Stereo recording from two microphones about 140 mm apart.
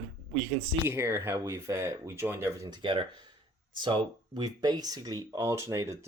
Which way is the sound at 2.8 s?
40° right (ahead or behind).